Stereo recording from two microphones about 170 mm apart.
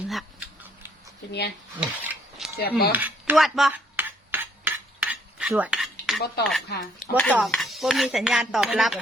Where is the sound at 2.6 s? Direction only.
65° left (ahead or behind).